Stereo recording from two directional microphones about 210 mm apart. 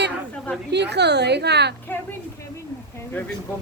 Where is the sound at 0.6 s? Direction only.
55° right (ahead or behind).